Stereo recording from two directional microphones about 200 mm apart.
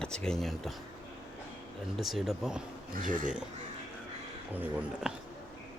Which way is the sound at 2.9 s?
40° right (ahead or behind).